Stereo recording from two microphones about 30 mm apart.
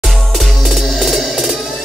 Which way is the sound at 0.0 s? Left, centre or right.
Centre.